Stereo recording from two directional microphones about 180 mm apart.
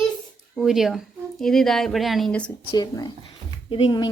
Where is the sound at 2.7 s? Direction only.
20° left (ahead or behind).